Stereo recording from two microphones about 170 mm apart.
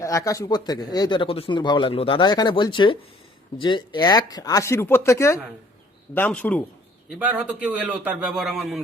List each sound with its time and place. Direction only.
0.0 s a man's voice: 20° left (ahead or behind)
7.2 s a man's voice: 10° right (ahead or behind)